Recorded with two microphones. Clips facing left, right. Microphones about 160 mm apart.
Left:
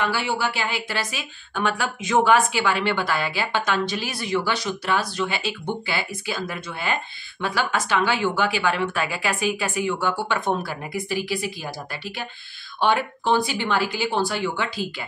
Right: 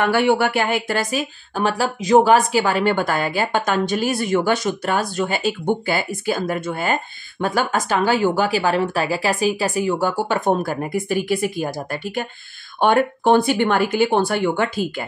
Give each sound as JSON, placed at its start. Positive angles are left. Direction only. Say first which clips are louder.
{"t": 0.0, "sound": "speech", "louder": "right 8 dB", "side_deg": -55}